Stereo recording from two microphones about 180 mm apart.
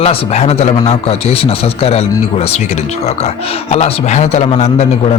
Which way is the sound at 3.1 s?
35° left (ahead or behind).